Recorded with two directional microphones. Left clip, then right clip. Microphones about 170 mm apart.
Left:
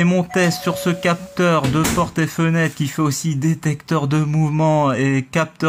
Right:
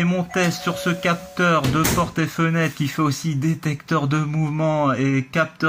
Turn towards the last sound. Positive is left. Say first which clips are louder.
# left 2 dB
turn(degrees=40)  # may be behind; listen again after turning